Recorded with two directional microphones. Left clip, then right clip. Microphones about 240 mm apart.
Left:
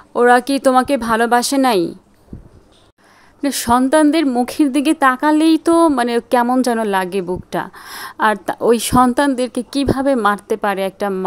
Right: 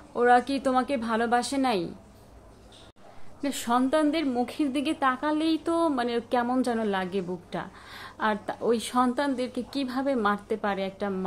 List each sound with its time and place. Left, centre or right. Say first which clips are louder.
0.1 s a woman's voice: left 9 dB; left
3.4 s a woman's voice: left 11 dB; left